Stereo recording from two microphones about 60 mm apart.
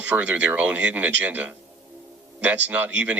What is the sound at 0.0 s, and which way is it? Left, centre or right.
Speech, right.